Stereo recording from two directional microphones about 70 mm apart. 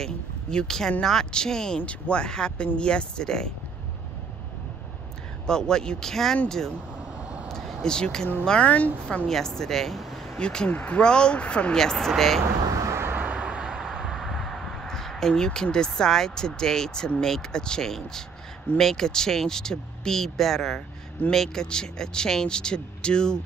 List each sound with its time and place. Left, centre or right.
0.0 s speech: centre
5.5 s speech: centre
7.2 s vehicle: centre
7.4 s a sound: centre
7.8 s speech: centre
9.3 s speech: centre
12.7 s vehicle: right
13.1 s vehicle: centre
18.8 s speech: centre